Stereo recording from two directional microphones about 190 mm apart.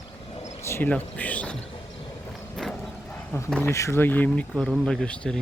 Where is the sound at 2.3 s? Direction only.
Centre (ahead or behind).